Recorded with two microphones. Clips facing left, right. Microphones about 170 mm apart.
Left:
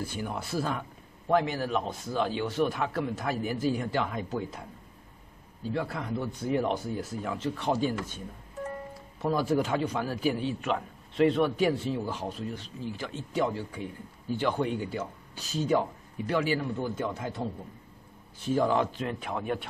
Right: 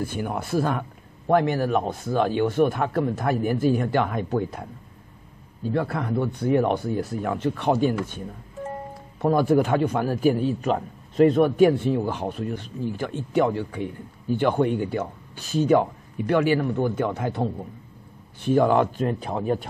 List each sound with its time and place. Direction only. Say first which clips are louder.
0.0 s a man's voice: right 6 dB; 55° right (ahead or behind)
9.2 s a man's voice: right 7 dB; 60° right (ahead or behind)
19.0 s speech: right 7 dB; 35° right (ahead or behind)